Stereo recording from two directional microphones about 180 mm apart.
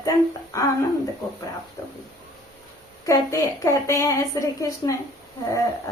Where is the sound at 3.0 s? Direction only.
15° left (ahead or behind).